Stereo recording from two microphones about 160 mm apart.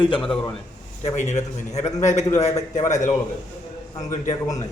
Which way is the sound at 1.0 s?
45° left (ahead or behind).